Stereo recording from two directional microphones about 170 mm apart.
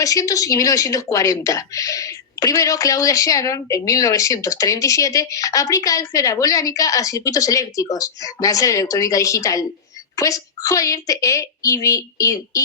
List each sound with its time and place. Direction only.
0.0 s a woman's voice: 20° left (ahead or behind)